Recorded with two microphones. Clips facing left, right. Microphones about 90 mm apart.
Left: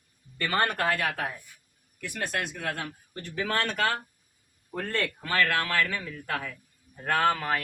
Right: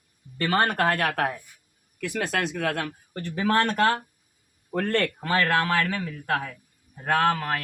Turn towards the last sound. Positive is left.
turn(degrees=0)  # may be behind; listen again after turning